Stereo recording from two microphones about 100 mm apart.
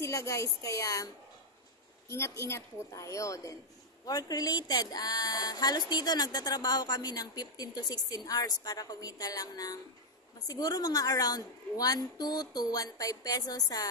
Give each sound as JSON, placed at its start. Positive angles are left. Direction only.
{"t": 0.0, "sound": "a woman's voice", "side_deg": 30}